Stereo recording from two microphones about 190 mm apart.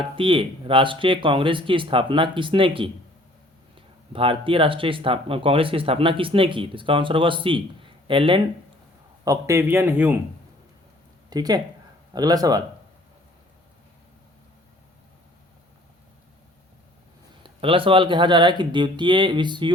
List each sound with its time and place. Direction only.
0.2 s speech: 25° right (ahead or behind)
9.2 s a man's voice: 15° right (ahead or behind)
11.3 s speech: 20° right (ahead or behind)
17.4 s speech: 30° right (ahead or behind)